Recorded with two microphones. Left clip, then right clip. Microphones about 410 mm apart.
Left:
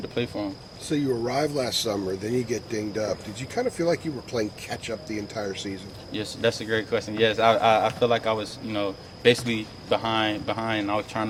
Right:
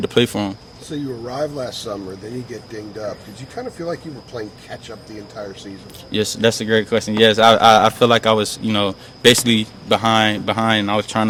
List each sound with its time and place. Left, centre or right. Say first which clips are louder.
0.0 s a man's voice: right 11 dB; right
0.9 s speech: left 1 dB; left
3.5 s speech: left 2 dB; left
6.1 s a man's voice: right 8 dB; right